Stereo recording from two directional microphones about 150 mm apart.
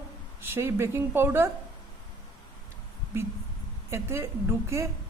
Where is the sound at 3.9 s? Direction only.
20° right (ahead or behind).